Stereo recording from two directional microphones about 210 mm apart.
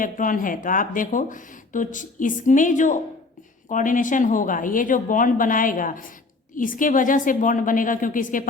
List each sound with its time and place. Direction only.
0.0 s speech: 40° left (ahead or behind)